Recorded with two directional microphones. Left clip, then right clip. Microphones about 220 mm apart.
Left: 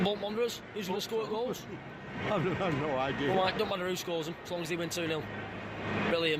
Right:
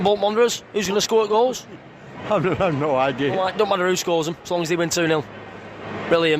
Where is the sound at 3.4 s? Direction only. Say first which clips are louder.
Right 11 dB; 35° right (ahead or behind).